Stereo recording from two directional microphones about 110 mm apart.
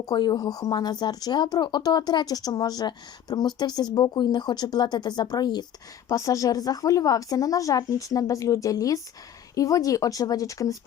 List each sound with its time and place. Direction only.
0.0 s speech: 40° left (ahead or behind)